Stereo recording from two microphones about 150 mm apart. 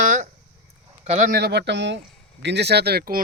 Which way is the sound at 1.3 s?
90° right.